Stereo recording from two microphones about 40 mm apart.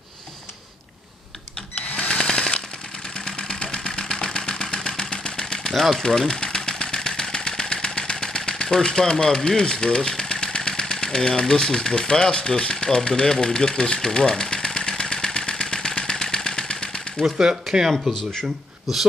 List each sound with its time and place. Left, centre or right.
1.8 s sewing machine: left
3.2 s engine: left
5.7 s engine: centre
9.6 s speech: centre
14.3 s engine: centre
17.2 s speech: centre